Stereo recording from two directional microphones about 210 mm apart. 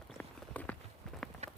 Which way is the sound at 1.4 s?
30° right (ahead or behind).